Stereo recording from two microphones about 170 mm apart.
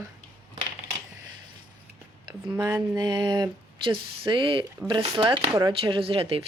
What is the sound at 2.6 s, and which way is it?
Speech, 10° right (ahead or behind).